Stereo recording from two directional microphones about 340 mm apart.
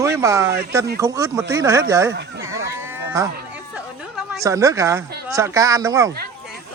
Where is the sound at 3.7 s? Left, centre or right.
Centre.